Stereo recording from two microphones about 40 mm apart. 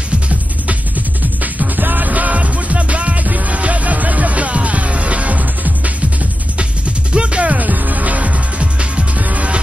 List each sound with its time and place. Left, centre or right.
0.7 s music: right
7.1 s music: right